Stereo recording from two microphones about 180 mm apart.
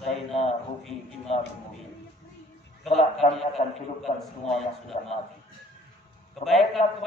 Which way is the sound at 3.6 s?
40° left (ahead or behind).